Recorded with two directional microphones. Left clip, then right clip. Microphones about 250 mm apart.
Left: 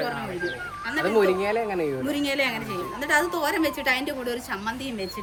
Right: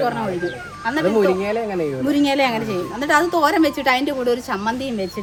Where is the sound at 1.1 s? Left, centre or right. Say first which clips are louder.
Even; centre.